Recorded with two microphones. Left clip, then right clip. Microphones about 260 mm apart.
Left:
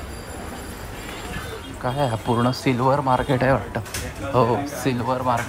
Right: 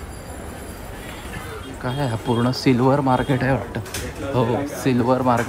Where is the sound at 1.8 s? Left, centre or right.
Left.